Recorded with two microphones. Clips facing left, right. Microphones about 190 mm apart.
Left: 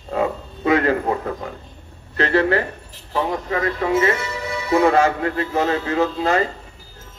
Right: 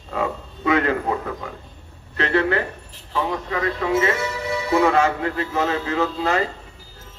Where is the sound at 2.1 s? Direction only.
35° left (ahead or behind).